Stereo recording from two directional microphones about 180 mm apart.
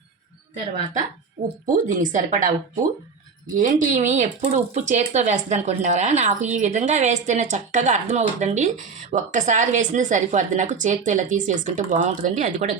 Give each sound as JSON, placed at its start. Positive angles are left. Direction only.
{"t": 1.6, "sound": "speech", "side_deg": -45}